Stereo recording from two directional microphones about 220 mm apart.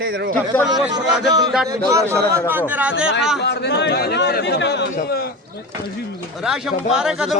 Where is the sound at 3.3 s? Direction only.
50° left (ahead or behind).